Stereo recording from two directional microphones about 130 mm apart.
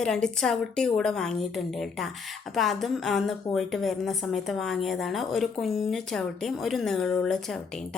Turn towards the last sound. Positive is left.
turn(degrees=5)  # may be behind; listen again after turning